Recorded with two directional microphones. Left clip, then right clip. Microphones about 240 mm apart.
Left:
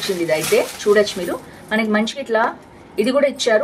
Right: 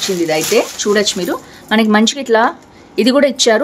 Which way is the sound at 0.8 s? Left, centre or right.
Right.